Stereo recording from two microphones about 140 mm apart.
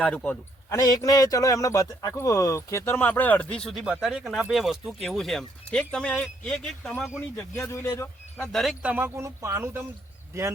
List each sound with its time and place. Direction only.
0.0 s a man's voice: 10° left (ahead or behind)
0.7 s speech: 25° left (ahead or behind); by 7.2 s centre (ahead or behind)
7.3 s speech: 20° left (ahead or behind)
8.4 s speech: centre (ahead or behind)
8.8 s speech: 10° right (ahead or behind)